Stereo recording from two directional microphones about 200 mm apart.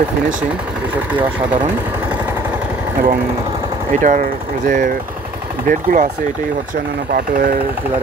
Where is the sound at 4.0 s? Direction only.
40° right (ahead or behind).